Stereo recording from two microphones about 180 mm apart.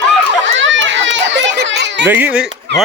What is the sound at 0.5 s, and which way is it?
Children playing, 90° right.